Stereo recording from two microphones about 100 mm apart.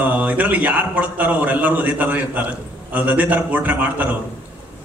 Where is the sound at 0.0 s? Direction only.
15° right (ahead or behind).